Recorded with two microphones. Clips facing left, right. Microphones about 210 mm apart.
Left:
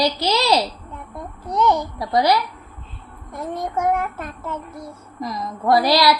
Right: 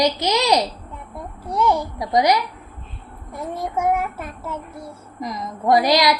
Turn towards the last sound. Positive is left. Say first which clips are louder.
# even
turn(degrees=-20)  # may be behind; listen again after turning